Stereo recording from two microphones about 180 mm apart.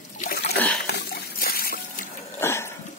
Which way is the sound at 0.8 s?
60° left (ahead or behind).